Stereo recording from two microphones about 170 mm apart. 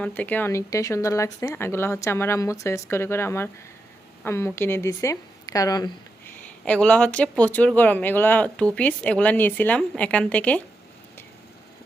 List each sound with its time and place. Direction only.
0.0 s a woman's voice: 10° left (ahead or behind)
6.2 s speech: 5° left (ahead or behind)